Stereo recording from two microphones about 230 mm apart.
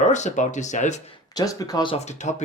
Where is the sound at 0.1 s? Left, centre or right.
Left.